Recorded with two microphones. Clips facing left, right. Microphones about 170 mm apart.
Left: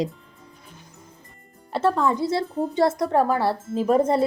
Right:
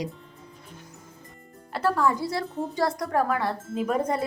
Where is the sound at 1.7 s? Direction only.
25° left (ahead or behind).